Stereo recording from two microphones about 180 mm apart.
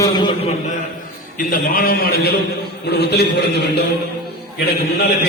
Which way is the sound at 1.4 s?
50° left (ahead or behind).